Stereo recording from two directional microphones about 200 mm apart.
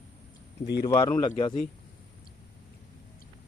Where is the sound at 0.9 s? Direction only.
20° left (ahead or behind).